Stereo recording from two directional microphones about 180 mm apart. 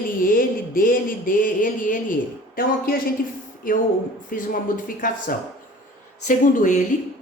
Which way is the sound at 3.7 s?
50° left (ahead or behind).